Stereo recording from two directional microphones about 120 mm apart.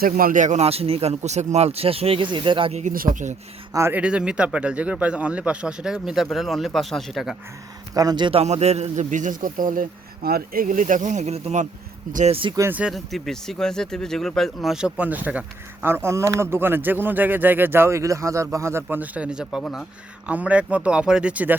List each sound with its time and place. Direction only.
0.3 s speech: 80° right; by 2.7 s 45° right (ahead or behind)
2.7 s speech: 90° right
3.7 s speech: 25° right (ahead or behind)
3.9 s speech: 10° right (ahead or behind)
7.9 s speech: 35° right (ahead or behind)
8.4 s a man's voice: 60° right (ahead or behind)
12.3 s speech: 45° right (ahead or behind)
12.9 s speech: centre (ahead or behind)